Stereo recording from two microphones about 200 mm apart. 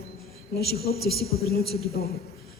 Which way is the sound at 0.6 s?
50° left (ahead or behind).